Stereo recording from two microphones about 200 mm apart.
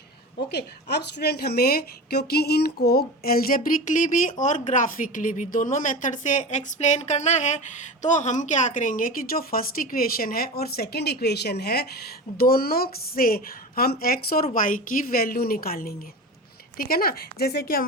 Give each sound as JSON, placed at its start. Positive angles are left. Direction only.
{"t": 0.4, "sound": "a woman's voice", "side_deg": 55}